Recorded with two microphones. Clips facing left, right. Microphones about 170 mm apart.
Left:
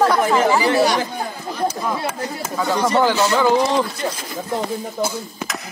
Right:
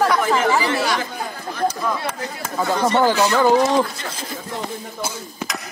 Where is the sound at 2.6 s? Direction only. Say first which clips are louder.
Even; 25° right (ahead or behind).